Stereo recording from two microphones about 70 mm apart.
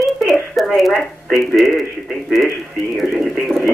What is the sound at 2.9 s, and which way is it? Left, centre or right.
Speech, centre.